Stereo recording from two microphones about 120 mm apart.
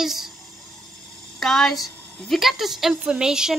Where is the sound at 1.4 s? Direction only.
5° left (ahead or behind).